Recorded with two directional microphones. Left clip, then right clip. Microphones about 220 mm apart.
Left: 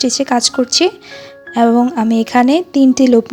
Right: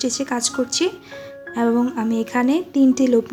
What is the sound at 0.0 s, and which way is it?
Speech, 30° left (ahead or behind).